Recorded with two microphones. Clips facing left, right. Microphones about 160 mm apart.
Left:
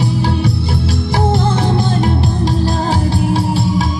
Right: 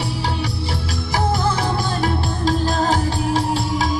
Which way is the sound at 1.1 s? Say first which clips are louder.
Left 3 dB; 30° left (ahead or behind).